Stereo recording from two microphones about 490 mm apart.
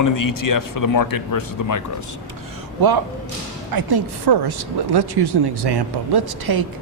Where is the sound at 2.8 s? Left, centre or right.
Right.